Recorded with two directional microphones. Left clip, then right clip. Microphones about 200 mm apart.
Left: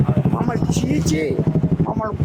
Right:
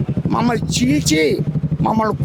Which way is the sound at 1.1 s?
50° right (ahead or behind).